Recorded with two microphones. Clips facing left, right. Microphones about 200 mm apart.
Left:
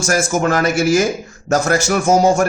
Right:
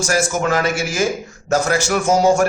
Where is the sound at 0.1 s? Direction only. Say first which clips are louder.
Left 3 dB; 45° left (ahead or behind).